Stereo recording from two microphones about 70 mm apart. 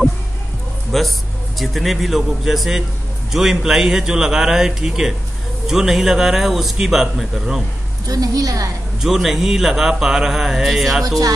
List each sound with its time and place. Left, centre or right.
0.9 s a man's voice: centre
8.1 s a woman's voice: right
9.0 s speech: centre
11.1 s a woman's voice: right